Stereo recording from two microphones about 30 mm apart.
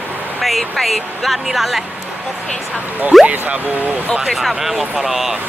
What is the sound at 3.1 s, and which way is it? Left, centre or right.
Speech, centre.